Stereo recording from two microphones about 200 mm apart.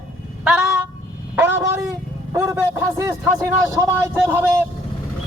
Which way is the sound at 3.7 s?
15° right (ahead or behind).